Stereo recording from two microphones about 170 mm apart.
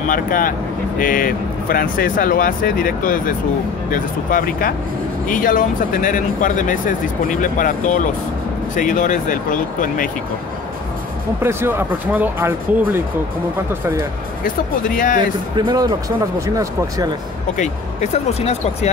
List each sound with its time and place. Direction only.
0.1 s speech: 55° left (ahead or behind)
11.4 s speech: 15° right (ahead or behind)
15.5 s speech: 25° right (ahead or behind)
17.6 s speech: 40° left (ahead or behind)